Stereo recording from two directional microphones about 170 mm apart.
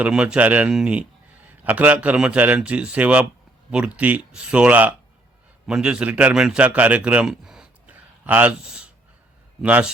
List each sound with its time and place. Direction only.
0.0 s a man's voice: 5° right (ahead or behind)